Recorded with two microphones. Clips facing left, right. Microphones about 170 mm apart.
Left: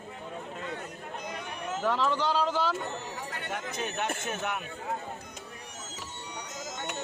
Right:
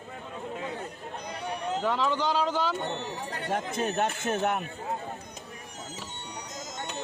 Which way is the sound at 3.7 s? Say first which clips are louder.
Right 3 dB; 45° right (ahead or behind).